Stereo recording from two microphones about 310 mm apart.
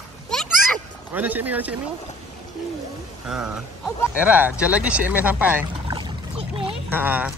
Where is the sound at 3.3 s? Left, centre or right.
Centre.